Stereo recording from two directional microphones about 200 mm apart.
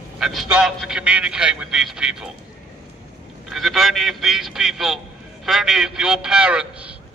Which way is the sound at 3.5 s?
Centre (ahead or behind).